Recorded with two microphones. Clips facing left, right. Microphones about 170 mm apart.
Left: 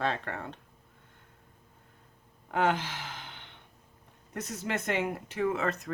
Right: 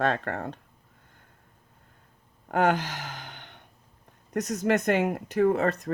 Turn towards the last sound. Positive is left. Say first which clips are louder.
# right 7 dB
turn(degrees=-35)  # may be behind; listen again after turning